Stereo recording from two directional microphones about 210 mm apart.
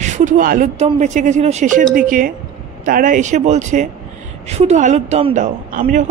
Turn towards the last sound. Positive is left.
turn(degrees=-40)  # may be behind; listen again after turning